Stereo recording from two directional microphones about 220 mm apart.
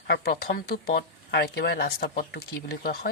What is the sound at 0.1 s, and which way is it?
Speech, 45° left (ahead or behind).